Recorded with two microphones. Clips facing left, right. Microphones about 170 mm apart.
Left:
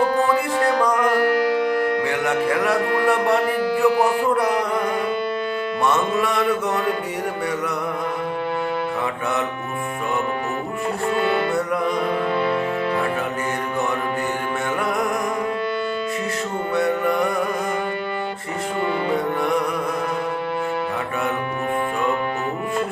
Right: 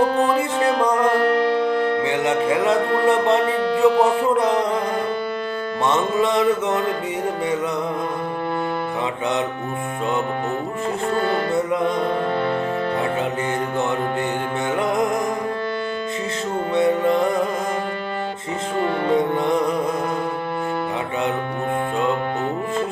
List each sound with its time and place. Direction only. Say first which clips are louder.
0.3 s music: even; 20° right (ahead or behind)
5.8 s music: right 2 dB; 20° right (ahead or behind)
16.8 s music: right 4 dB; 20° right (ahead or behind)